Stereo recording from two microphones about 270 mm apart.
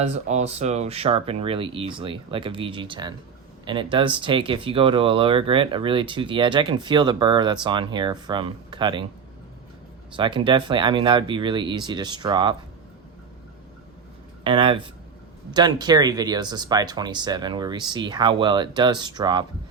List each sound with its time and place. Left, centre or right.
0.0 s speech: right
10.2 s speech: centre
14.4 s speech: centre